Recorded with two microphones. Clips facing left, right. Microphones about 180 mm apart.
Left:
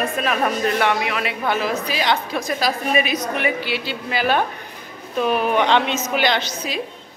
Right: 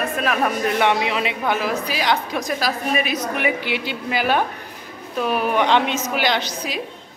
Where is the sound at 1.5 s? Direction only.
10° right (ahead or behind).